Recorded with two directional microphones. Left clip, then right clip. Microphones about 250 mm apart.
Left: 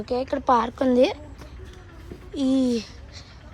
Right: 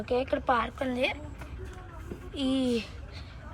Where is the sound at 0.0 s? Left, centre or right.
Centre.